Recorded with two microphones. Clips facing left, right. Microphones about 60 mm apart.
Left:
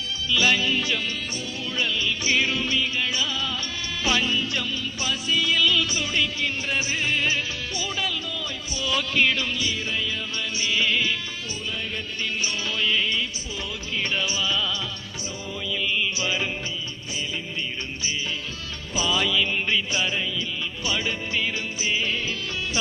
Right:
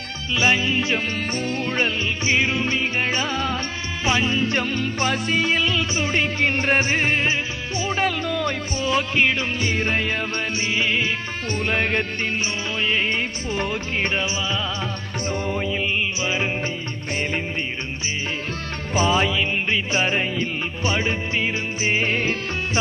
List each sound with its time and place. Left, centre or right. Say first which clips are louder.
0.3 s music: right 3 dB; right
4.0 s music: right 3 dB; right
8.8 s music: right 3 dB; right
9.6 s music: right 5 dB; right
10.6 s music: even; right
11.6 s music: right 11 dB; right
12.8 s music: right 3 dB; right
15.3 s music: right 7 dB; right
18.9 s music: right 4 dB; right